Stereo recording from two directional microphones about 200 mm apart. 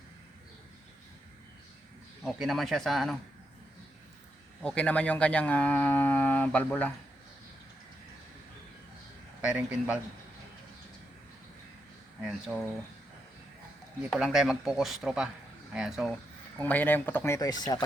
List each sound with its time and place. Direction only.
2.2 s speech: centre (ahead or behind)
4.6 s speech: 5° left (ahead or behind)
9.4 s speech: 5° right (ahead or behind)
12.2 s speech: 5° right (ahead or behind)
14.1 s speech: centre (ahead or behind)
16.6 s speech: 10° left (ahead or behind)